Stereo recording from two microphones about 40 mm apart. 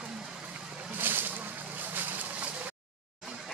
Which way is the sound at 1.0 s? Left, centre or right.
Right.